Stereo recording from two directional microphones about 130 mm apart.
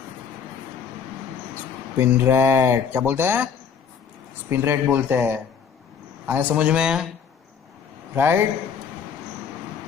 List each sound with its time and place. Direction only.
2.0 s speech: 20° right (ahead or behind)
8.1 s speech: 15° right (ahead or behind)